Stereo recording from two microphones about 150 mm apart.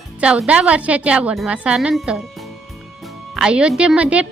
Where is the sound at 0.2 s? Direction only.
5° right (ahead or behind).